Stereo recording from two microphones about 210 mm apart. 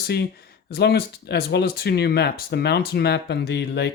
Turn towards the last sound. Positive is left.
turn(degrees=55)  # may be behind; listen again after turning